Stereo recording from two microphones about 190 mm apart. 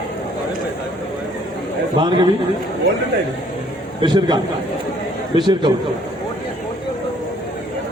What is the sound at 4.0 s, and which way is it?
Speech, 25° right (ahead or behind).